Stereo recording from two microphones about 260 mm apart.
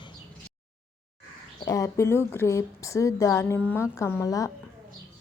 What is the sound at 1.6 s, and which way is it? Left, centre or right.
A woman's voice, centre.